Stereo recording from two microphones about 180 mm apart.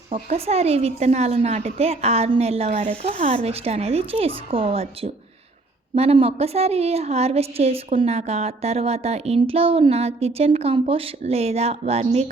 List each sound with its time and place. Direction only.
0.1 s a woman's voice: 35° right (ahead or behind)